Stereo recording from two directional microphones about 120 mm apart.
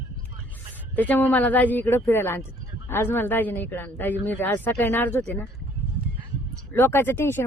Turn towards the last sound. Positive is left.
turn(degrees=20)  # may be behind; listen again after turning